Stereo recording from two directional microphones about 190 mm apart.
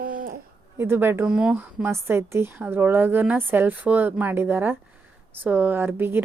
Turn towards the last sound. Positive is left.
turn(degrees=-10)  # may be behind; listen again after turning